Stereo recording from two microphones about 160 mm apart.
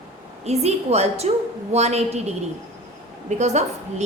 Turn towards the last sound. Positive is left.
turn(degrees=-45)  # may be behind; listen again after turning